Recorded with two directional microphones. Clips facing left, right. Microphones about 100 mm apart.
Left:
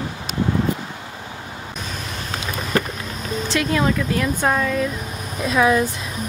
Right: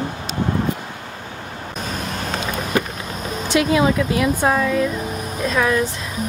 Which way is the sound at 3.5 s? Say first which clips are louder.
Right 4 dB; 15° right (ahead or behind).